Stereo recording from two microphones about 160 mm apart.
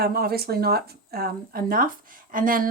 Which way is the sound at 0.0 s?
75° right (ahead or behind).